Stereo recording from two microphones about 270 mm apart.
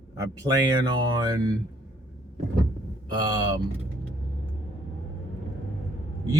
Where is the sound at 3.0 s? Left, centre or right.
Centre.